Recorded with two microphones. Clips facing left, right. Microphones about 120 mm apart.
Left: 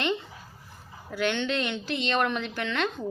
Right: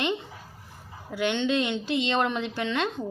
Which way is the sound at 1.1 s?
20° right (ahead or behind).